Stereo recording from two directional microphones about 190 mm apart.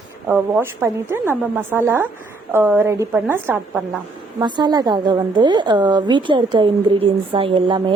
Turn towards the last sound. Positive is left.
turn(degrees=-25)  # may be behind; listen again after turning